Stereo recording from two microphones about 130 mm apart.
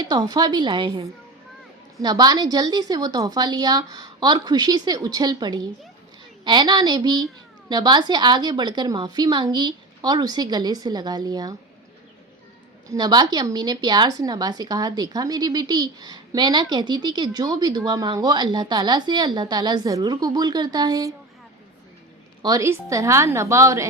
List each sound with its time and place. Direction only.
0.0 s a woman's voice: 30° right (ahead or behind)
12.9 s a woman's voice: 30° right (ahead or behind)
22.4 s a woman's voice: 25° right (ahead or behind)